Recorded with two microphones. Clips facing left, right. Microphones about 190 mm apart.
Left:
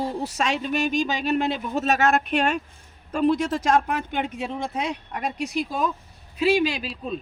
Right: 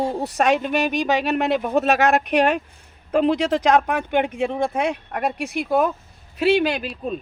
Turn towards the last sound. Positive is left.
turn(degrees=-50)  # may be behind; listen again after turning